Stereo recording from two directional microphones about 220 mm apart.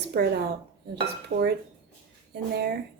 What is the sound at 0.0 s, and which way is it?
Speech, 50° right (ahead or behind).